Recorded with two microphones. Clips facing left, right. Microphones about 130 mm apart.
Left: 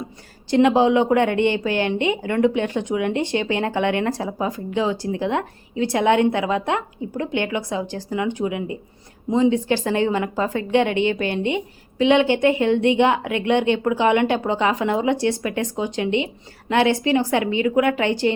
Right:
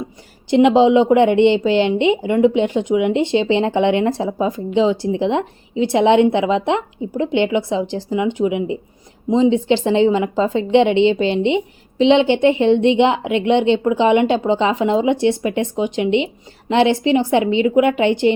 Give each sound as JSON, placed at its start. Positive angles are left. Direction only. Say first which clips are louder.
{"t": 0.5, "sound": "speech", "louder": "right 4 dB", "side_deg": -20}